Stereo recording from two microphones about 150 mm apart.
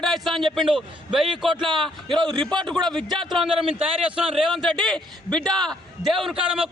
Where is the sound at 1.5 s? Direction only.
30° right (ahead or behind).